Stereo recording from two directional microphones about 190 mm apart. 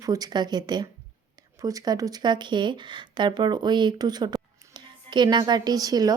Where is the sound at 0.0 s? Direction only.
20° right (ahead or behind).